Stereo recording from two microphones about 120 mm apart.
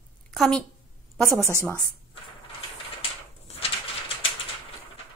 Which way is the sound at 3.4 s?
60° left (ahead or behind).